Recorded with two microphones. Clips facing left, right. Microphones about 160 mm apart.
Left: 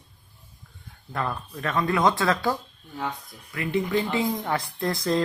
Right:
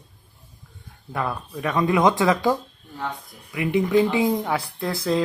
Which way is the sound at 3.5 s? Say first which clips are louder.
Right 6 dB; 15° right (ahead or behind).